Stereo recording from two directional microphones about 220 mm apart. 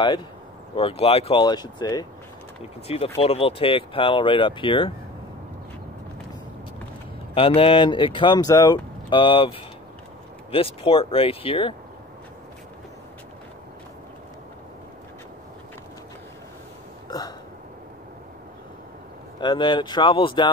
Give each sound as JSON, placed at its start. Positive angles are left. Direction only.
{"t": 0.7, "sound": "speech", "side_deg": 25}
{"t": 7.3, "sound": "speech", "side_deg": 25}
{"t": 19.4, "sound": "speech", "side_deg": 20}